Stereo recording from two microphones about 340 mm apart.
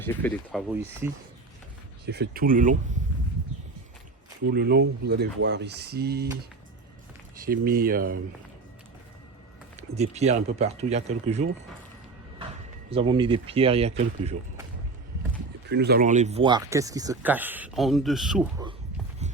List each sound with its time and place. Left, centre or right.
0.0 s speech: centre
2.0 s speech: right
4.4 s speech: right
7.4 s speech: right
9.9 s speech: centre
12.9 s speech: centre
15.7 s speech: right; by 18.4 s centre